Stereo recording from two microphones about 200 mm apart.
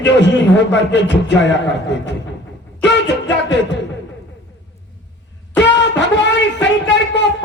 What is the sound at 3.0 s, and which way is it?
Music, 60° left (ahead or behind).